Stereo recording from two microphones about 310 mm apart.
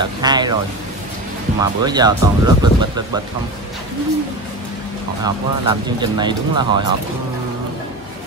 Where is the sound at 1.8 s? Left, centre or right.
Centre.